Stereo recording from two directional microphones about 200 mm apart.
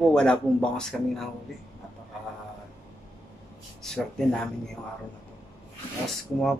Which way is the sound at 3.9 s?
Centre (ahead or behind).